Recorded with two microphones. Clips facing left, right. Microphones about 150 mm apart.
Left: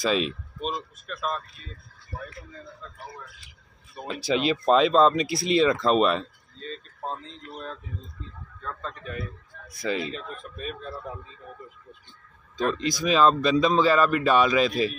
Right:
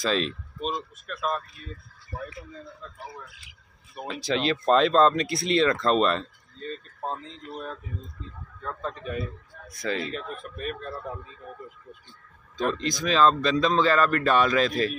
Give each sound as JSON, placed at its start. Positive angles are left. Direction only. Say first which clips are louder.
{"t": 0.0, "sound": "speech", "louder": "left 1 dB", "side_deg": 5}
{"t": 4.2, "sound": "speech", "louder": "left 2 dB", "side_deg": 5}
{"t": 7.0, "sound": "speech", "louder": "right 1 dB", "side_deg": -15}
{"t": 9.7, "sound": "speech", "louder": "left 1 dB", "side_deg": 5}
{"t": 10.1, "sound": "speech", "louder": "right 2 dB", "side_deg": -5}
{"t": 12.7, "sound": "speech", "louder": "left 2 dB", "side_deg": 5}